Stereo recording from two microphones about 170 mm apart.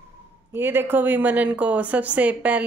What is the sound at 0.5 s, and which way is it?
A woman's voice, 10° right (ahead or behind).